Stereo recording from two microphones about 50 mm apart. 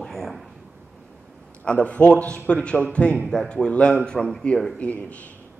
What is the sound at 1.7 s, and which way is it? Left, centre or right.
A man's voice, left.